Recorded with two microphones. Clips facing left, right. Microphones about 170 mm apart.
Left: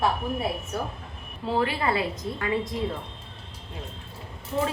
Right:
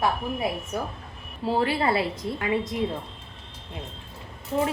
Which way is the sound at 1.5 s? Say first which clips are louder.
Right 2 dB; 30° right (ahead or behind).